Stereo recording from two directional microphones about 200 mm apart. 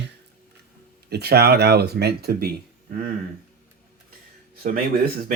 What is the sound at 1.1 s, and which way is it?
Speech, 55° right (ahead or behind).